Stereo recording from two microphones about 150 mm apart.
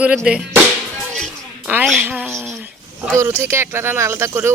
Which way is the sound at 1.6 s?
5° right (ahead or behind).